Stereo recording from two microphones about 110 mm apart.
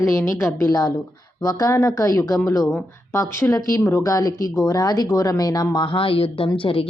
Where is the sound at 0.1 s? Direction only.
25° left (ahead or behind).